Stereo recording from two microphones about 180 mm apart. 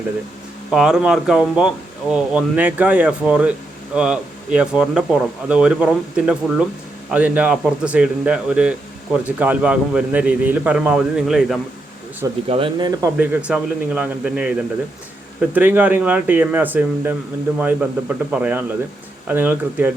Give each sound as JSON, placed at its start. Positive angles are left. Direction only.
{"t": 0.7, "sound": "speech", "side_deg": -5}
{"t": 12.5, "sound": "speech", "side_deg": -30}
{"t": 12.9, "sound": "speech", "side_deg": -15}